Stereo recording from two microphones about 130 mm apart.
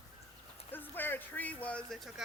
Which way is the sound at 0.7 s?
15° left (ahead or behind).